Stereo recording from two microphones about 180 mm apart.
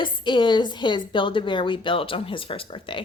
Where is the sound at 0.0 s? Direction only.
25° left (ahead or behind).